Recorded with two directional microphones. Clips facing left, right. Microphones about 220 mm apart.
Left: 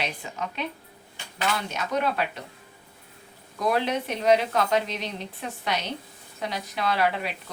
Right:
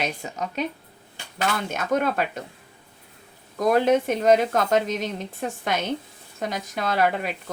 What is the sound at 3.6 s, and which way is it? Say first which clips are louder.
A woman's voice: right 6 dB; 45° right (ahead or behind).